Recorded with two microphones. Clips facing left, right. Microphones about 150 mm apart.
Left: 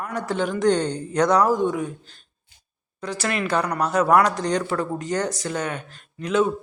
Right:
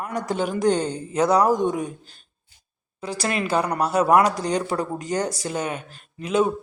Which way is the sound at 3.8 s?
10° right (ahead or behind).